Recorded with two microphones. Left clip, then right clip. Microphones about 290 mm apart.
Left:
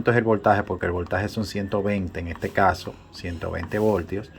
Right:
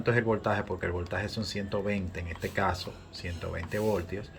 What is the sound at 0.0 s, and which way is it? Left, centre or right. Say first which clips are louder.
Speech: left 8 dB; centre.